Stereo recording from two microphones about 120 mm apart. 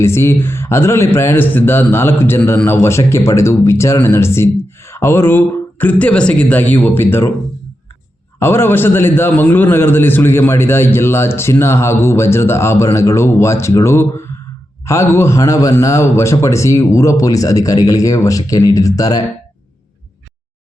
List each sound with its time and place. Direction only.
0.0 s a man's voice: 20° left (ahead or behind)
8.4 s a man's voice: 20° left (ahead or behind)